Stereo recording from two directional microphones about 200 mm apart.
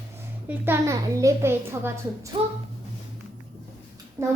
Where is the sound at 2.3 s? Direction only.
25° right (ahead or behind).